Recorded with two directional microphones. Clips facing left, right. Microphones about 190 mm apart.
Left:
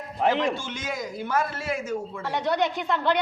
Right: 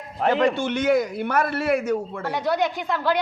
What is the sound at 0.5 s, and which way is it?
A woman's voice, 65° right (ahead or behind).